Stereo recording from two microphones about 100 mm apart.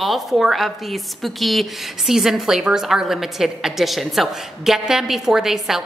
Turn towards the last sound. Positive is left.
turn(degrees=-5)  # may be behind; listen again after turning